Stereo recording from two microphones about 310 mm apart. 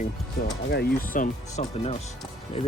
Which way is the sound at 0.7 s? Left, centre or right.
Left.